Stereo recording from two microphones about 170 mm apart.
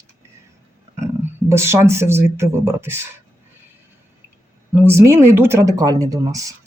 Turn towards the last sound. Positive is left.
turn(degrees=-20)  # may be behind; listen again after turning